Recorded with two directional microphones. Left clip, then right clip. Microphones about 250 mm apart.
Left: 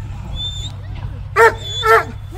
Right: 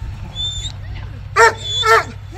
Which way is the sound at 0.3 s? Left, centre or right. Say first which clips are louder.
Right 3 dB; left.